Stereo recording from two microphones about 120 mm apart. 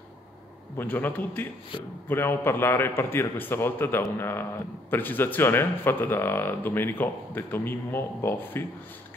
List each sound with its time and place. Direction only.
0.7 s a man's voice: 15° left (ahead or behind)